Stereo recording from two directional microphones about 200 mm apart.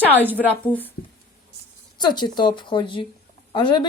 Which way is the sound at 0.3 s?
5° left (ahead or behind).